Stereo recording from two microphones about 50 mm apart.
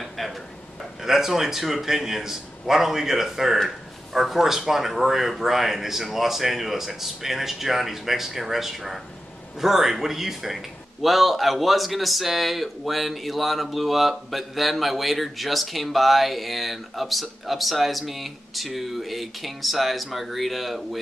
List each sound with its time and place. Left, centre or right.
1.0 s a man's voice: centre